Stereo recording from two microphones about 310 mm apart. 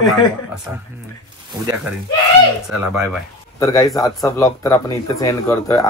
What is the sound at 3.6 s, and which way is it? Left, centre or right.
Speech, centre.